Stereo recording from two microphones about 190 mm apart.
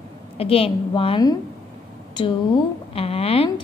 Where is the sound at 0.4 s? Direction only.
30° left (ahead or behind).